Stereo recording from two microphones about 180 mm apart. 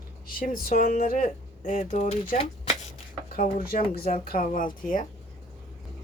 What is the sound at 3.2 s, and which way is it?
Speech, 50° left (ahead or behind).